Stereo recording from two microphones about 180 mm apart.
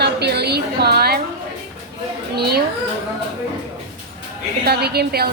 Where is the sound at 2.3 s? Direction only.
65° right (ahead or behind).